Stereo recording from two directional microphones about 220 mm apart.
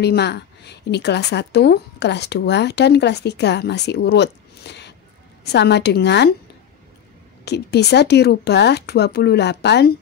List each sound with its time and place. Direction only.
0.0 s a woman's voice: 50° left (ahead or behind)
7.4 s a woman's voice: 50° left (ahead or behind)